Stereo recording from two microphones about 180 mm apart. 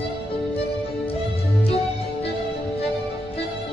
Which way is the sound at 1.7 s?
35° left (ahead or behind).